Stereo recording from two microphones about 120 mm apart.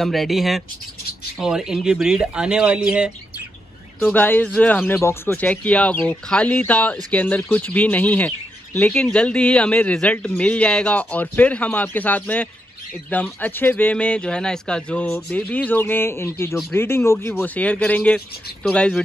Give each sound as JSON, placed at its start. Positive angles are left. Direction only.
{"t": 0.0, "sound": "speech", "side_deg": 0}
{"t": 4.0, "sound": "speech", "side_deg": 15}